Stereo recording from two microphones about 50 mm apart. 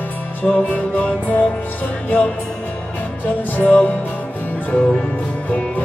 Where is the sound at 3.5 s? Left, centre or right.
Left.